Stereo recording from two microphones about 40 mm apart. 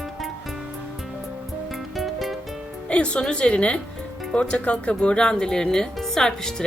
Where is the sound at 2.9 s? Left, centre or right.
Left.